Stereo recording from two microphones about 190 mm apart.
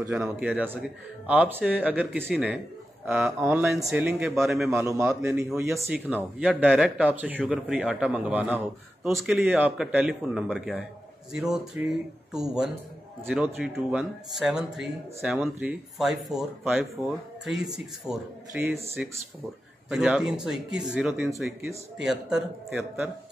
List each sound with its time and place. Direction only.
0.1 s a man's voice: 5° right (ahead or behind)
3.3 s a man's voice: 15° right (ahead or behind)
3.6 s speech: centre (ahead or behind)
4.6 s a man's voice: 15° right (ahead or behind)